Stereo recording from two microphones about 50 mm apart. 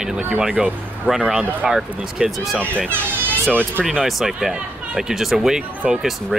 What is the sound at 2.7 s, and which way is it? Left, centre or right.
Speech, left.